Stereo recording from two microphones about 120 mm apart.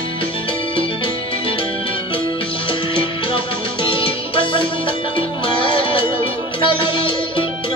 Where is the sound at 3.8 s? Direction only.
45° left (ahead or behind).